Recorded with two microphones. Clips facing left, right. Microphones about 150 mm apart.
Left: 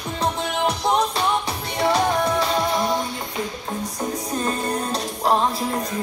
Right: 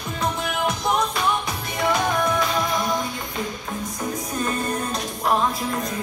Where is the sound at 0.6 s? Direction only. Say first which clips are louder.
Left 2 dB; 30° left (ahead or behind).